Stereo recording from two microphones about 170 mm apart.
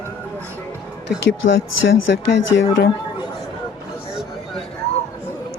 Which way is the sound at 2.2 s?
90° left.